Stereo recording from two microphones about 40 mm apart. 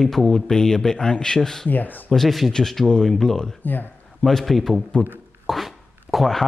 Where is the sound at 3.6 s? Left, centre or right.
Left.